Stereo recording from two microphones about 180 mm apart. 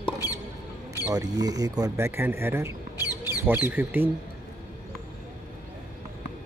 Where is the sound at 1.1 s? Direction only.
20° right (ahead or behind).